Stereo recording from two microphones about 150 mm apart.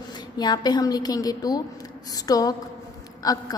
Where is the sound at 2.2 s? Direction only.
25° left (ahead or behind).